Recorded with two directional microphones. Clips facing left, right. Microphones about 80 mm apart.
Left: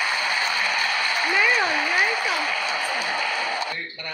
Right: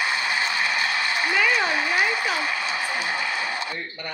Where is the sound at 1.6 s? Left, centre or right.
Right.